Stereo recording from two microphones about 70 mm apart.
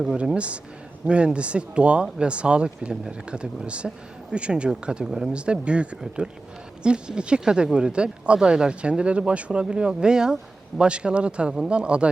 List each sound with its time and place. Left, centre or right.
0.0 s speech: centre